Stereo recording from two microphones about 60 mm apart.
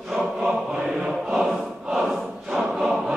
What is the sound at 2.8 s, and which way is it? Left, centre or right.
Choir, centre.